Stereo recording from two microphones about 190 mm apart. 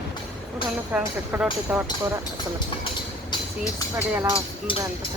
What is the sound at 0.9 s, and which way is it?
Speech, 5° right (ahead or behind).